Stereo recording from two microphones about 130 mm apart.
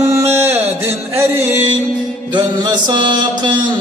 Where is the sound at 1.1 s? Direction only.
20° right (ahead or behind).